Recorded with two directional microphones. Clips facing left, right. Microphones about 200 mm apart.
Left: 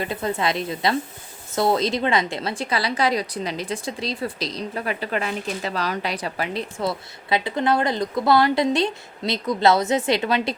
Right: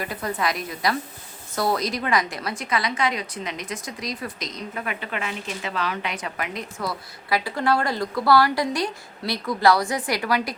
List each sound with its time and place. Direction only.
0.0 s a woman's voice: 25° left (ahead or behind)